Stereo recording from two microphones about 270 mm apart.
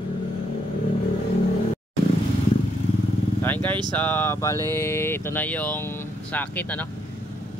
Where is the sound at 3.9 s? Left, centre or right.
Centre.